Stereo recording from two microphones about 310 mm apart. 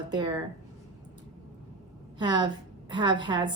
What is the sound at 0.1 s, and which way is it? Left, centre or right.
Speech, centre.